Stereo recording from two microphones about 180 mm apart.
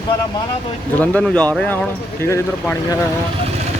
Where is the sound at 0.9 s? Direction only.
10° left (ahead or behind).